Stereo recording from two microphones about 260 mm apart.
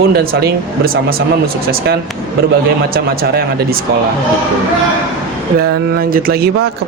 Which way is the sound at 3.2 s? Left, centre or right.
Right.